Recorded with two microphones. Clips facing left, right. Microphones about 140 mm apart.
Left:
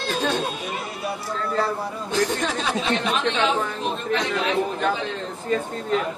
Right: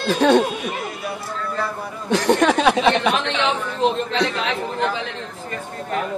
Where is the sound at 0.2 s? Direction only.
70° right (ahead or behind).